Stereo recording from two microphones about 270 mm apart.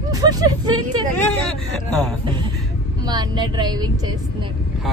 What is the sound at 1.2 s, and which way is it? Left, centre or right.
Speech, centre.